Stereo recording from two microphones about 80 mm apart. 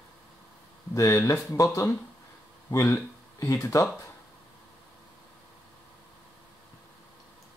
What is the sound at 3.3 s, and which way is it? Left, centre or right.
Speech, left.